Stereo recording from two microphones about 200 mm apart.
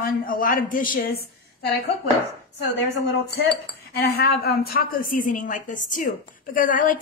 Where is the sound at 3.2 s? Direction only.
55° left (ahead or behind).